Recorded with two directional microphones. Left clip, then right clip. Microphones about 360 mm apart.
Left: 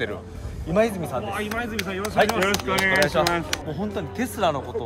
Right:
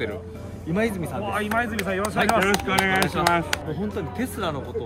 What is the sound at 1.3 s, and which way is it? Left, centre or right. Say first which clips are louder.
Speech: right 3 dB; centre.